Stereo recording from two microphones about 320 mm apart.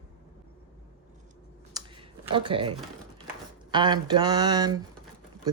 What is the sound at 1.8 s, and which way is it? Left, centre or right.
Computer keyboard, centre.